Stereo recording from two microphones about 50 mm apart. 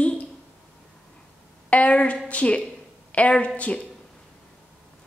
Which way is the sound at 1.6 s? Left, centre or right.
Left.